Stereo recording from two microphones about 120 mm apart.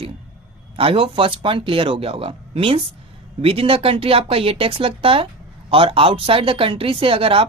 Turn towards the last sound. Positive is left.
turn(degrees=-50)  # may be behind; listen again after turning